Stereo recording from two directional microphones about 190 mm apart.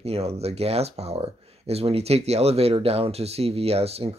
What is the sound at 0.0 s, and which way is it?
Speech, 35° right (ahead or behind).